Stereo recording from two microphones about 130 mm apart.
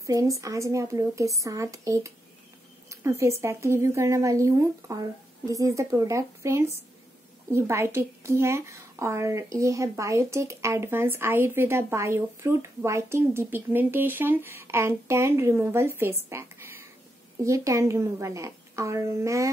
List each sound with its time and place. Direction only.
0.0 s speech: 25° right (ahead or behind)